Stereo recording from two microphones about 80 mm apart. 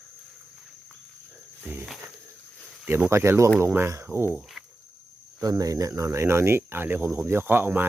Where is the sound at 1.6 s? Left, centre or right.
Right.